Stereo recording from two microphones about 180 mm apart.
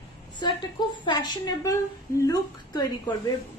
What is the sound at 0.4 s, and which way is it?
A woman's voice, 25° left (ahead or behind).